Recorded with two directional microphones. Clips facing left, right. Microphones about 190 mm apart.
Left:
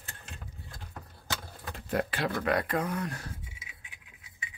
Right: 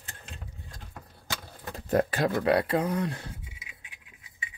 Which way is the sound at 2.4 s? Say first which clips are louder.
Right 4 dB; 30° right (ahead or behind).